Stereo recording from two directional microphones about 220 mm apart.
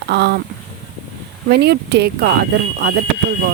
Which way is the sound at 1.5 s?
50° right (ahead or behind).